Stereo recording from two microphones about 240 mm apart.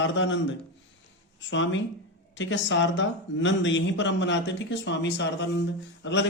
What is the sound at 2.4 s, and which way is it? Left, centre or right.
A man's voice, left.